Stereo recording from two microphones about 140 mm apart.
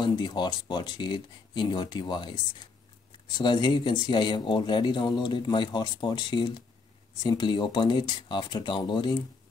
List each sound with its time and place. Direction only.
0.0 s speech: 30° left (ahead or behind)
3.3 s speech: 30° left (ahead or behind)